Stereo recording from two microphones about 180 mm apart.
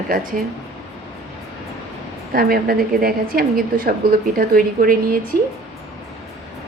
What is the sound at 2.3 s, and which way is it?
A woman's voice, 55° right (ahead or behind).